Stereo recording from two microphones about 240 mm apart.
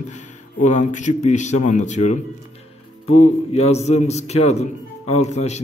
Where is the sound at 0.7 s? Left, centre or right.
Left.